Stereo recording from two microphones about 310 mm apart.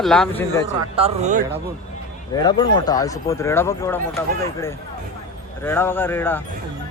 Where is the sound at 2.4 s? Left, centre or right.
Centre.